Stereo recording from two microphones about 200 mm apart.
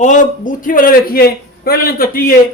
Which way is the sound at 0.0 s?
40° left (ahead or behind).